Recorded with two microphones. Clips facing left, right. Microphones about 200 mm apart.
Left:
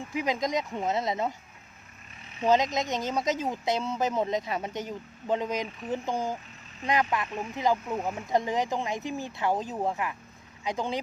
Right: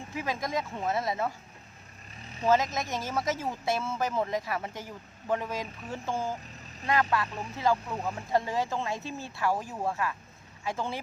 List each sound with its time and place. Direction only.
0.1 s speech: 20° left (ahead or behind)
2.4 s speech: 15° left (ahead or behind)